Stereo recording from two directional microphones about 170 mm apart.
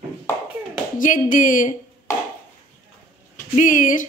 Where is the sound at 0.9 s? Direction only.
50° left (ahead or behind).